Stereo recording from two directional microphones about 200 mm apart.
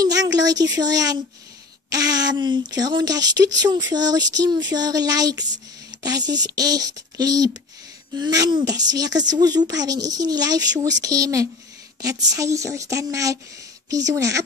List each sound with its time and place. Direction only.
0.0 s speech: 20° right (ahead or behind)